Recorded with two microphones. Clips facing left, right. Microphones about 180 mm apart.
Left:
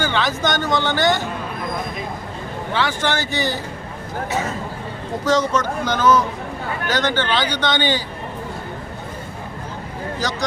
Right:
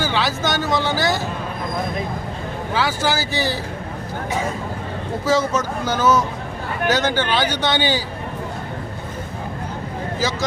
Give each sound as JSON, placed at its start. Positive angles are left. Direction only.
{"t": 0.0, "sound": "speech", "side_deg": -5}
{"t": 2.7, "sound": "speech", "side_deg": -5}
{"t": 5.2, "sound": "speech", "side_deg": -5}